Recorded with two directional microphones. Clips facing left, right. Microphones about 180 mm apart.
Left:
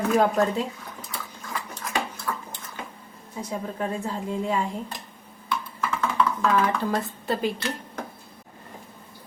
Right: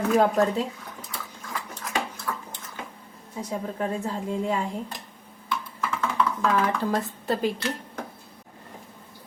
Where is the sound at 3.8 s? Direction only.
45° right (ahead or behind).